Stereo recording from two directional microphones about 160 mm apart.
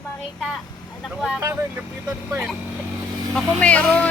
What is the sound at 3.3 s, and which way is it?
Speech, 10° left (ahead or behind).